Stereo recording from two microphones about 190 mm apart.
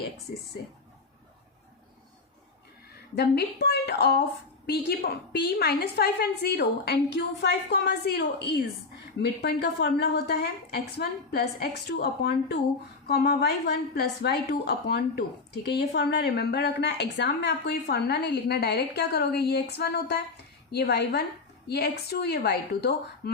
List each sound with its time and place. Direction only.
3.2 s a woman's voice: 60° left (ahead or behind)